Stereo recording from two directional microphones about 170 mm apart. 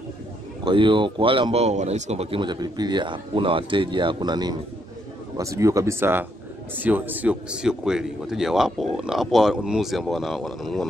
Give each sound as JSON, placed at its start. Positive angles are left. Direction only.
{"t": 0.7, "sound": "speech", "side_deg": -30}